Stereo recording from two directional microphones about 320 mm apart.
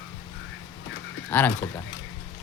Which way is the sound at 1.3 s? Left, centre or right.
Centre.